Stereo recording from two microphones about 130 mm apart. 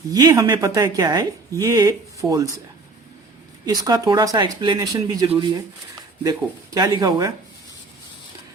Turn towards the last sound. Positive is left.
turn(degrees=-25)  # may be behind; listen again after turning